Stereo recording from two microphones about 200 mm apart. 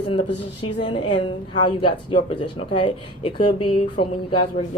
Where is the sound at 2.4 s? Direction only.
25° left (ahead or behind).